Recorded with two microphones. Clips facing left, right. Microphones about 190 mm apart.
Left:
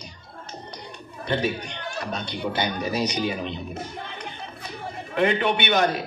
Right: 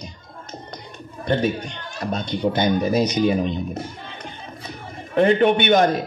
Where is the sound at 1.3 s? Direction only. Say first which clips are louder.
Right 4 dB; 45° right (ahead or behind).